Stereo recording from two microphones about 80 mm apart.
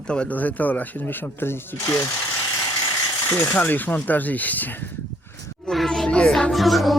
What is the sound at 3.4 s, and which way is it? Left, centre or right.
Speech, left.